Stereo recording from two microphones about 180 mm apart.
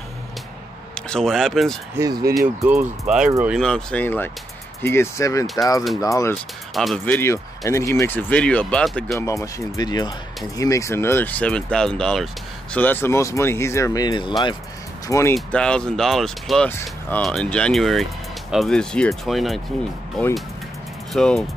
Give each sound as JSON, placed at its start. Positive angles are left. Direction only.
{"t": 0.9, "sound": "speech", "side_deg": 5}
{"t": 2.0, "sound": "speech", "side_deg": -20}
{"t": 2.7, "sound": "speech", "side_deg": -5}
{"t": 3.5, "sound": "speech", "side_deg": 5}
{"t": 6.7, "sound": "speech", "side_deg": 0}
{"t": 7.2, "sound": "speech", "side_deg": 15}
{"t": 15.3, "sound": "speech", "side_deg": 5}